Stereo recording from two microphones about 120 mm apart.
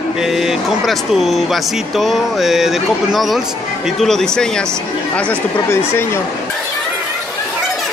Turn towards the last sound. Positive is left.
turn(degrees=20)  # may be behind; listen again after turning